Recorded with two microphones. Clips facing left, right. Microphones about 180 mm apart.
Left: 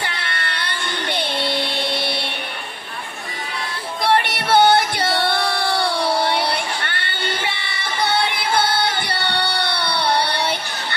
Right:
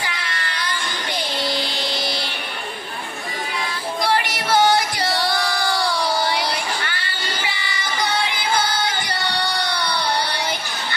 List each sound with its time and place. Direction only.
0.0 s child singing: 60° left (ahead or behind)
4.0 s music: 60° left (ahead or behind)
5.3 s crowd: 25° left (ahead or behind)
5.9 s music: 60° left (ahead or behind)
9.9 s a sound: 65° left (ahead or behind)